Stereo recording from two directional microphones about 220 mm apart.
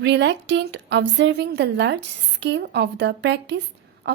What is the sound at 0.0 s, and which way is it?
A woman's voice, 50° right (ahead or behind).